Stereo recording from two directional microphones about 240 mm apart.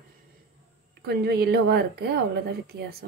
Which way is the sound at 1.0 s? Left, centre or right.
Right.